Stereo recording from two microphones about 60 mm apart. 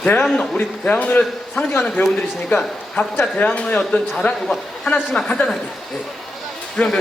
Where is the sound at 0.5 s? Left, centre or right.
Left.